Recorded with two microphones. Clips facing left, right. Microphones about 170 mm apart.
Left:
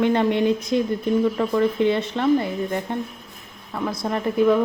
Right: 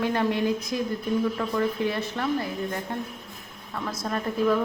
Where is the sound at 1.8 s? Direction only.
25° left (ahead or behind).